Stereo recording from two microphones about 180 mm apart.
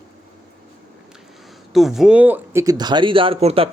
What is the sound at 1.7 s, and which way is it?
Speech, centre (ahead or behind).